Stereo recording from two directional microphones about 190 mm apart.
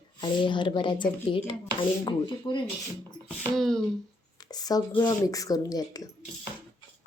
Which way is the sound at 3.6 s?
Centre (ahead or behind).